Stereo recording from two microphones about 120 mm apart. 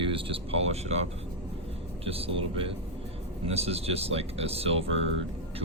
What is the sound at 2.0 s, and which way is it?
Speech, 55° right (ahead or behind).